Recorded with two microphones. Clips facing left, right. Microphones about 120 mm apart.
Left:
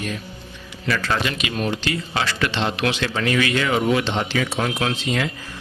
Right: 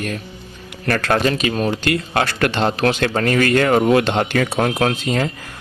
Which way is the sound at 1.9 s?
55° right (ahead or behind).